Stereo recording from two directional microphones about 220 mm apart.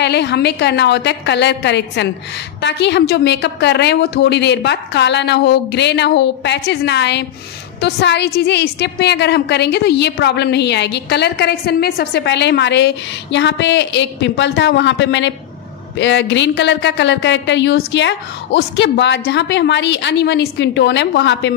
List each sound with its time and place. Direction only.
0.0 s a woman's voice: 50° left (ahead or behind)